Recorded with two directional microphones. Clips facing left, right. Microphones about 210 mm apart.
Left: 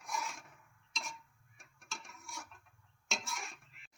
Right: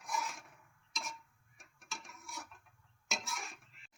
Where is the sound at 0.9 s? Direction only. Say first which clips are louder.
Right 1 dB; centre (ahead or behind).